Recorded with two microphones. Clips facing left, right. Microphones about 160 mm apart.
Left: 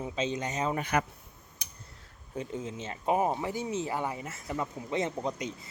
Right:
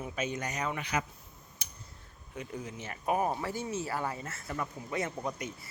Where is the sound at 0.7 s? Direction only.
50° left (ahead or behind).